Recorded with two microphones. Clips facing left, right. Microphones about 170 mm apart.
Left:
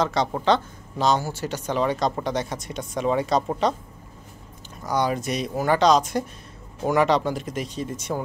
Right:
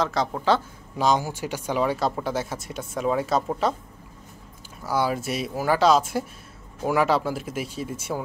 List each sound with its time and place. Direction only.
0.0 s speech: centre (ahead or behind)
4.8 s speech: 5° right (ahead or behind)